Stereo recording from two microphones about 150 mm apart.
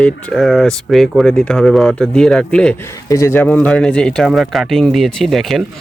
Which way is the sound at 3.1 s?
20° left (ahead or behind).